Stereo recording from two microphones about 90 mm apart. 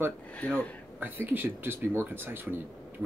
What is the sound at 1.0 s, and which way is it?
Speech, 20° right (ahead or behind).